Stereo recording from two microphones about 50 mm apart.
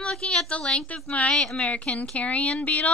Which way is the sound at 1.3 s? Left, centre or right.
Centre.